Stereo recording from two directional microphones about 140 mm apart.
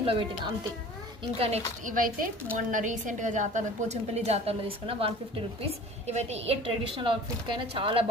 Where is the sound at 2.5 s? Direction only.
65° right (ahead or behind).